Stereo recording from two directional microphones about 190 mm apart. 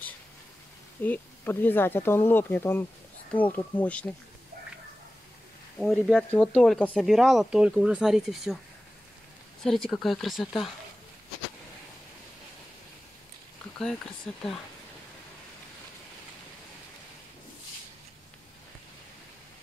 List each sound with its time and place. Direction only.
1.0 s speech: 10° left (ahead or behind)
5.8 s speech: centre (ahead or behind)
9.6 s speech: 5° left (ahead or behind)
14.3 s speech: 5° left (ahead or behind)